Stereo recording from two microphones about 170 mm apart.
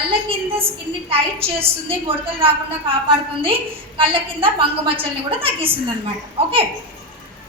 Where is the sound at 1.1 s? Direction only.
35° right (ahead or behind).